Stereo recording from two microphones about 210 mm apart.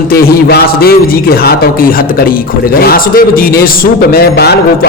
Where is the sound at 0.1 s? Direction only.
45° left (ahead or behind).